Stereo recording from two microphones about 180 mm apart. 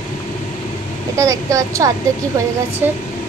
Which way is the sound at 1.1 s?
15° right (ahead or behind).